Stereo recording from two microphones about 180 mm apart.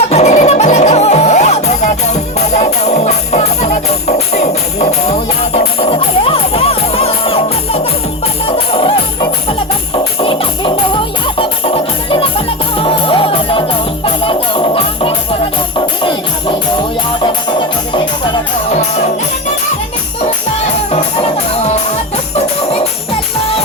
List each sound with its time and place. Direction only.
0.1 s music: 35° left (ahead or behind)
22.4 s music: 35° left (ahead or behind)